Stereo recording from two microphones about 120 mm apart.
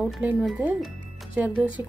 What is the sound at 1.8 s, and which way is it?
Speech, 25° right (ahead or behind).